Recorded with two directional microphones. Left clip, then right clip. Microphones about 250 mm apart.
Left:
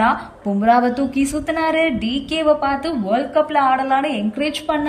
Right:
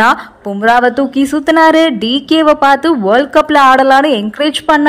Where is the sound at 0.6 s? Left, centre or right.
Centre.